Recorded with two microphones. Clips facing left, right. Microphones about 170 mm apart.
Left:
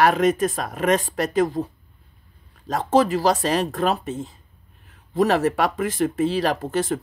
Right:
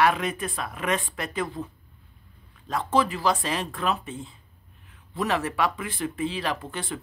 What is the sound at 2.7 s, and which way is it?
Speech, 40° left (ahead or behind).